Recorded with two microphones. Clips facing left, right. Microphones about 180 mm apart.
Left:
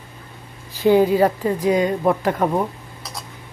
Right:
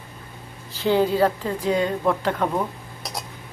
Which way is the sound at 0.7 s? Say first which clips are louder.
Left 5 dB; 10° left (ahead or behind).